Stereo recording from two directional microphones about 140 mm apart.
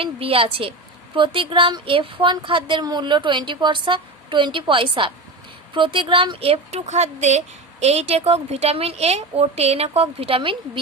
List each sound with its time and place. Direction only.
0.0 s speech: 40° right (ahead or behind)